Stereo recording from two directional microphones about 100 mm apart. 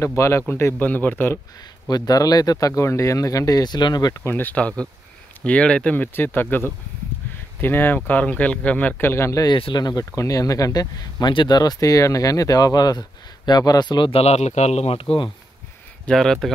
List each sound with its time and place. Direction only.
0.0 s a man's voice: 30° left (ahead or behind)
1.9 s speech: 40° left (ahead or behind)
4.2 s a man's voice: 20° left (ahead or behind)
9.6 s speech: 50° left (ahead or behind)
14.1 s speech: 90° left
16.1 s speech: 5° left (ahead or behind)